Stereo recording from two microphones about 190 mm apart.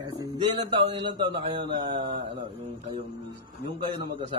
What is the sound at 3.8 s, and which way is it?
Speech, 25° right (ahead or behind).